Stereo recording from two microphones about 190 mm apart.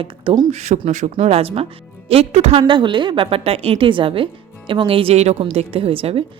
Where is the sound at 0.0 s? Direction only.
25° right (ahead or behind).